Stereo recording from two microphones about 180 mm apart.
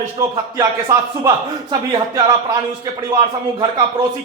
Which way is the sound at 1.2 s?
20° right (ahead or behind).